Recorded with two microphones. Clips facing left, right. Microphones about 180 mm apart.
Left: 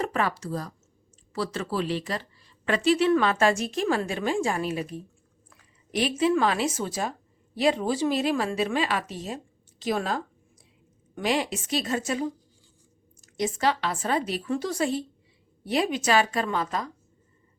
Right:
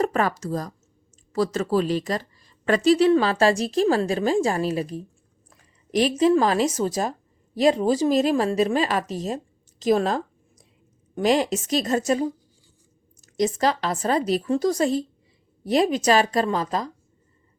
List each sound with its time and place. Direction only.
0.0 s a woman's voice: 45° right (ahead or behind)
13.2 s a woman's voice: 40° right (ahead or behind)